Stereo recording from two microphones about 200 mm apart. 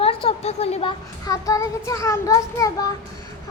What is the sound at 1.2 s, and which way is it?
Child singing, 15° left (ahead or behind).